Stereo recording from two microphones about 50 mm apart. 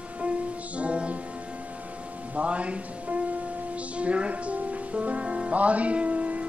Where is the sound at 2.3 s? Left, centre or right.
Right.